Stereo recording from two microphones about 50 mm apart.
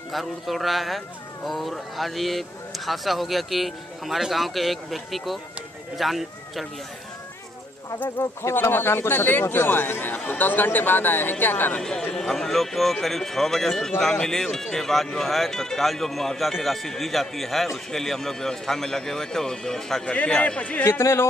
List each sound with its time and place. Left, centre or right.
0.1 s speech: centre
8.2 s speech: left
11.8 s speech: centre
12.3 s speech: centre
20.2 s a man's voice: left
20.8 s speech: left